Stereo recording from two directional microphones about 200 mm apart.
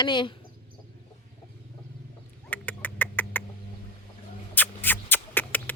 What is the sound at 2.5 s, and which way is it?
Chicken, 10° left (ahead or behind).